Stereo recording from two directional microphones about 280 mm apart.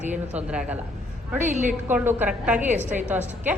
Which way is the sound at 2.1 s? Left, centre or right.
Centre.